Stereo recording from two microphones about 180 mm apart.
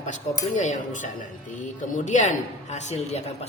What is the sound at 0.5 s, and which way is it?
Speech, 45° left (ahead or behind).